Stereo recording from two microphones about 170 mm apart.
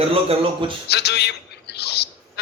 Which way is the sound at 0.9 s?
75° left (ahead or behind).